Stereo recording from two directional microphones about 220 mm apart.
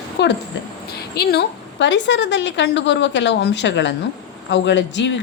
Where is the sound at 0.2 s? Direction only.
50° left (ahead or behind).